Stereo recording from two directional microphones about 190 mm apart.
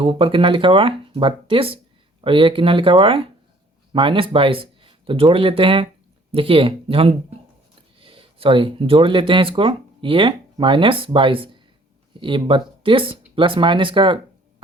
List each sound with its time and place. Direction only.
0.0 s speech: 30° right (ahead or behind)